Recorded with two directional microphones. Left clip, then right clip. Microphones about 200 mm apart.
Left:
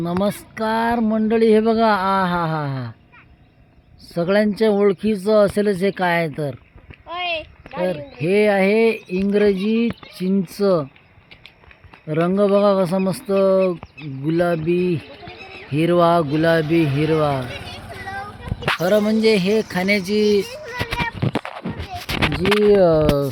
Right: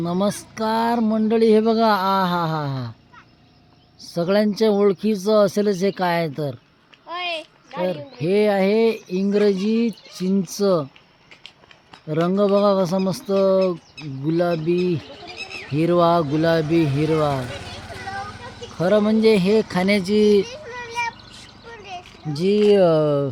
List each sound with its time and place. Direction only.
0.0 s speech: 10° right (ahead or behind)
4.0 s speech: 5° right (ahead or behind)
7.1 s a sound: 25° left (ahead or behind)
7.8 s speech: centre (ahead or behind)
12.0 s speech: 5° right (ahead or behind)
17.9 s vehicle: 15° left (ahead or behind)
18.8 s speech: centre (ahead or behind); by 20.5 s 20° right (ahead or behind)
22.4 s speech: 5° right (ahead or behind)